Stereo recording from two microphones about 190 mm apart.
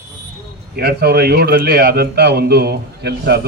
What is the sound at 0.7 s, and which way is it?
A man's voice, 55° right (ahead or behind).